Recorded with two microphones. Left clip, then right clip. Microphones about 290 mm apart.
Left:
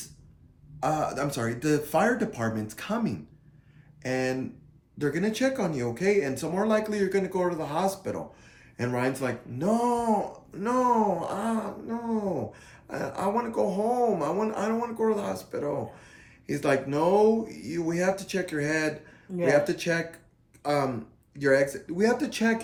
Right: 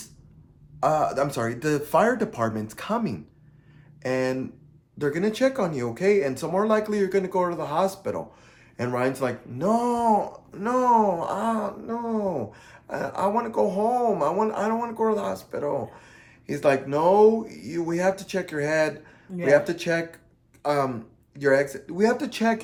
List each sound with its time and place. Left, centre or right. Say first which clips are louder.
0.8 s speech: right 5 dB; centre